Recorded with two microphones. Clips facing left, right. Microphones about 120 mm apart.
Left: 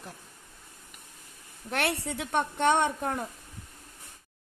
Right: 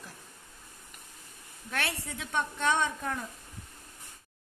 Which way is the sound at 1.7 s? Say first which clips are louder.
Left 5 dB; 65° left (ahead or behind).